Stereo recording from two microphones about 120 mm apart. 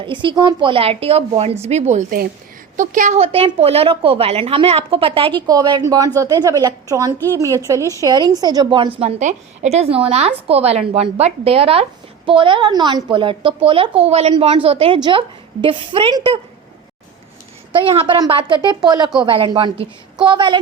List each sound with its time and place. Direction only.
0.0 s a woman's voice: 40° right (ahead or behind)
1.6 s a woman's voice: 70° right (ahead or behind)
2.7 s a woman's voice: 90° right; by 5.4 s 50° right (ahead or behind)
5.5 s a woman's voice: 35° right (ahead or behind)
9.0 s a woman's voice: 70° right (ahead or behind); by 16.1 s 45° right (ahead or behind)
17.7 s a woman's voice: 50° right (ahead or behind)
19.2 s a woman's voice: 50° right (ahead or behind)